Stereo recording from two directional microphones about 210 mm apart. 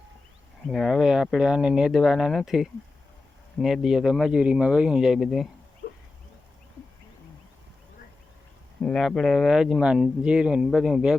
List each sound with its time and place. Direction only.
0.7 s speech: centre (ahead or behind)
5.8 s a sound: 50° left (ahead or behind)
8.8 s speech: 5° left (ahead or behind)